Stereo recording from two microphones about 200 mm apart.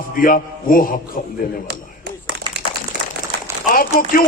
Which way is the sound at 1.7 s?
50° right (ahead or behind).